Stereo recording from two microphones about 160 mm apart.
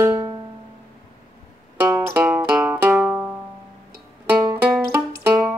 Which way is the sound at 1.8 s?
15° right (ahead or behind).